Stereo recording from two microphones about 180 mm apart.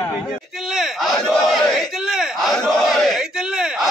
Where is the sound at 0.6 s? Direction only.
5° right (ahead or behind).